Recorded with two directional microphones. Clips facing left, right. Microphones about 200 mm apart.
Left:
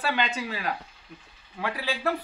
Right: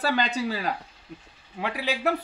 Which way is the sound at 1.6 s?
20° right (ahead or behind).